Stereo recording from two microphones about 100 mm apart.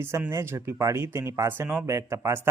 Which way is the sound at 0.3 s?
25° right (ahead or behind).